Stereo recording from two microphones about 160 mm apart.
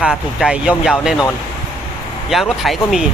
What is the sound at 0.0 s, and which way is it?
Speech, 5° right (ahead or behind).